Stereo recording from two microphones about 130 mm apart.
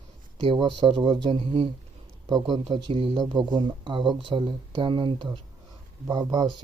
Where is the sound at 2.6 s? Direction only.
45° right (ahead or behind).